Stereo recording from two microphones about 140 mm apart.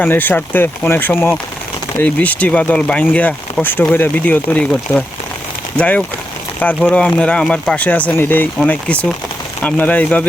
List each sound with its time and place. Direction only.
0.0 s speech: 15° left (ahead or behind)